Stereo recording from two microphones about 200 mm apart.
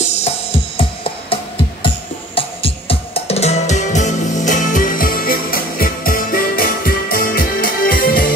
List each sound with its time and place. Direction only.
0.0 s music: 35° left (ahead or behind)